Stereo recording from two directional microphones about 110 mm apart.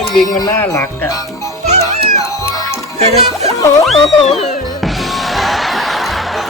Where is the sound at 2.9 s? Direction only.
80° right.